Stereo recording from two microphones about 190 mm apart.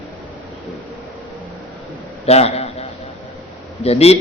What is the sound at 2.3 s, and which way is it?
Speech, 35° left (ahead or behind).